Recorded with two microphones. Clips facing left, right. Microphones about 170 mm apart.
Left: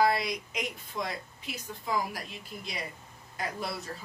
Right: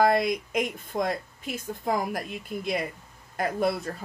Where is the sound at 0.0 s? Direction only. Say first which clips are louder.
Right 5 dB; 50° right (ahead or behind).